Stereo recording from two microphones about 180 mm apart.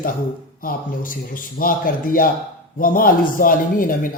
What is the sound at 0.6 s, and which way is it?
Speech, 50° left (ahead or behind).